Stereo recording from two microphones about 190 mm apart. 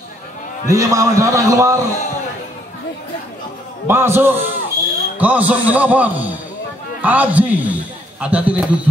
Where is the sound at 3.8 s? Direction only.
15° right (ahead or behind).